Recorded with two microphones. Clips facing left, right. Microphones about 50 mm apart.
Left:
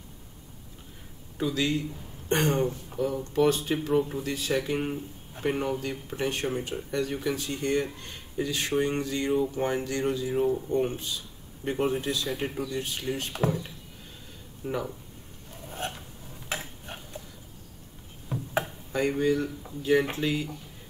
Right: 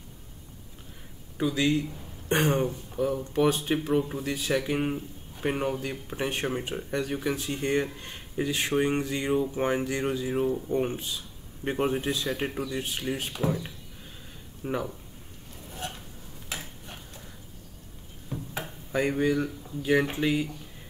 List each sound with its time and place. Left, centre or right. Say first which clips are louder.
1.4 s speech: right 2 dB; centre; by 7.0 s right
7.0 s speech: left 1 dB; centre
14.6 s speech: right 1 dB; centre
15.8 s a sound: left 2 dB; left
18.3 s a sound: left 2 dB; left
18.9 s speech: right 1 dB; centre